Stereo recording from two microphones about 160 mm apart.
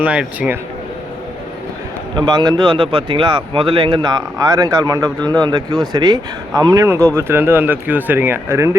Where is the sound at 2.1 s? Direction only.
25° right (ahead or behind).